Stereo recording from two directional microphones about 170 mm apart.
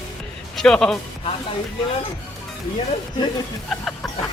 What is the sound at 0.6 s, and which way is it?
Speech, 5° left (ahead or behind).